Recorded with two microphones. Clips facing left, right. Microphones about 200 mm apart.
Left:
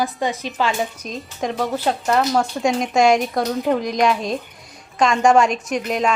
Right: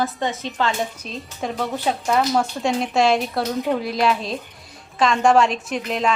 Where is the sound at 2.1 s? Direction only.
5° right (ahead or behind).